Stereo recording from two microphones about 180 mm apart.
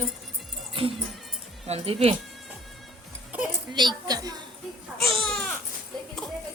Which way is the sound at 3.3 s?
10° right (ahead or behind).